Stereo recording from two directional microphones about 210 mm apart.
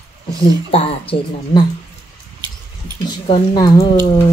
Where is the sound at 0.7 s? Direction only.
25° left (ahead or behind).